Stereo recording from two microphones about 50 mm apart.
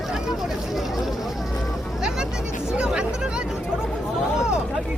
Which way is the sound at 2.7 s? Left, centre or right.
Right.